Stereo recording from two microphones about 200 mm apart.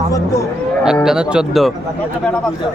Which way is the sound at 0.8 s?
5° right (ahead or behind).